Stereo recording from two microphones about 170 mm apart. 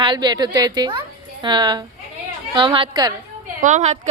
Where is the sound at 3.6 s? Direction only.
45° right (ahead or behind).